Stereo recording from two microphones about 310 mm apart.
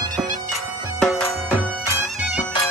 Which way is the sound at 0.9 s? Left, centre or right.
Centre.